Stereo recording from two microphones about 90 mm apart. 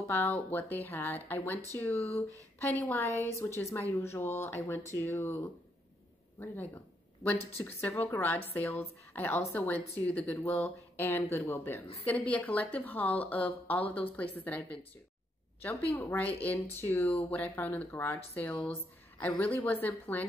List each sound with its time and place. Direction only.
0.0 s speech: 25° left (ahead or behind)
3.0 s speech: 30° left (ahead or behind)
6.4 s speech: 20° left (ahead or behind)
16.2 s speech: 15° left (ahead or behind)